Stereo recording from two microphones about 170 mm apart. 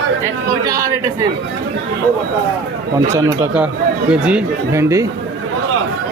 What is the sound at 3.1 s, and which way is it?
Speech, 15° right (ahead or behind).